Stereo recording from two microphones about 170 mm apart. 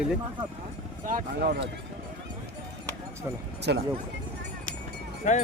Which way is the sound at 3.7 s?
90° right.